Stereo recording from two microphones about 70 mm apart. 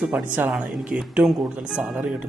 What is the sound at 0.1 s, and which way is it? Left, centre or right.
Speech, right.